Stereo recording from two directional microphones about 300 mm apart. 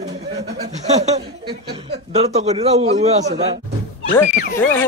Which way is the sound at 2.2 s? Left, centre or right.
Right.